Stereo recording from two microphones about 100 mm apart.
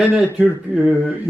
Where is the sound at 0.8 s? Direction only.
10° right (ahead or behind).